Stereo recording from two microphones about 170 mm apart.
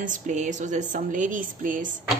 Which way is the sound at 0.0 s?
45° right (ahead or behind).